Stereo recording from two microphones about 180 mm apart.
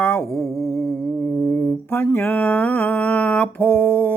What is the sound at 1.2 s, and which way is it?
Mantra, 10° left (ahead or behind).